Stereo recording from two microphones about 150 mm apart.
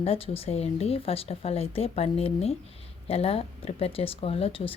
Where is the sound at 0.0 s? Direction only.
40° left (ahead or behind).